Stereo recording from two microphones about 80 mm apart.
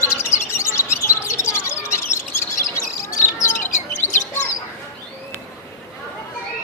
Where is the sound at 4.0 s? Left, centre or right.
Left.